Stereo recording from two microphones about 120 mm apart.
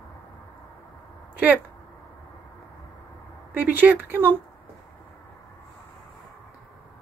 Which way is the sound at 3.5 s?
15° right (ahead or behind).